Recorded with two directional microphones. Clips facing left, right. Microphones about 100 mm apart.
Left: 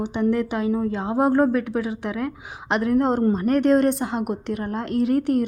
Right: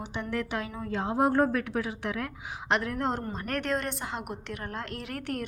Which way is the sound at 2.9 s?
20° left (ahead or behind).